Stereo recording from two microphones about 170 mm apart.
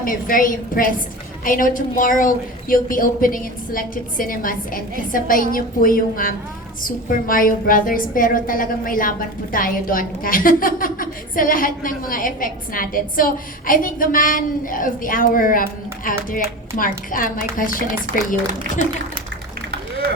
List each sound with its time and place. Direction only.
0.0 s a woman's voice: 55° left (ahead or behind)